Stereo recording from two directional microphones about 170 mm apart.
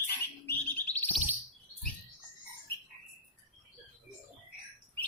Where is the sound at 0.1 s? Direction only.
10° left (ahead or behind).